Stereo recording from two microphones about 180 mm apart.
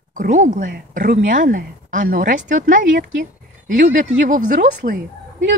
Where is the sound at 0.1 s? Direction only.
45° right (ahead or behind).